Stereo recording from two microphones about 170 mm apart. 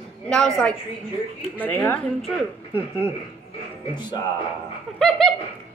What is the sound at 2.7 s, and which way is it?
Speech, 10° right (ahead or behind).